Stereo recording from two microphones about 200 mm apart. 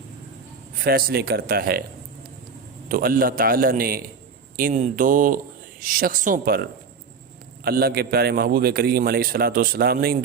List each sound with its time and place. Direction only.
0.8 s a man's voice: 50° right (ahead or behind)
2.9 s a man's voice: 45° right (ahead or behind)